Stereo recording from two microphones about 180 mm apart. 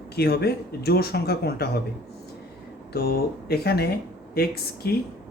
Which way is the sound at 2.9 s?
60° left (ahead or behind).